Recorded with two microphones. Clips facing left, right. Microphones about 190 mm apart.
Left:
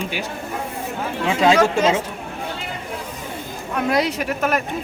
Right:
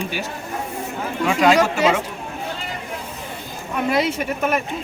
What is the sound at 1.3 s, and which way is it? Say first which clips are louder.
Speech: even; 25° left (ahead or behind).